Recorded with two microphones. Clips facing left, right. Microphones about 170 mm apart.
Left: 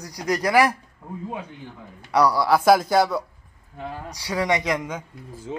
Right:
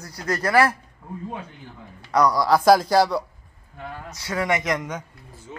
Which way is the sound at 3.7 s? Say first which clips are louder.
Left 3 dB; 15° left (ahead or behind).